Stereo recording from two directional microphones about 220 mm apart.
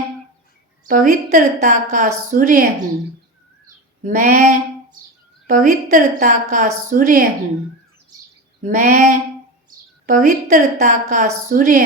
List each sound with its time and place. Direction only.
0.9 s a woman's voice: 35° right (ahead or behind)
4.0 s a woman's voice: 35° right (ahead or behind)
8.6 s a woman's voice: 35° right (ahead or behind)